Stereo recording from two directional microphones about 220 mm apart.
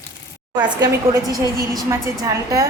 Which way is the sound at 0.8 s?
15° right (ahead or behind).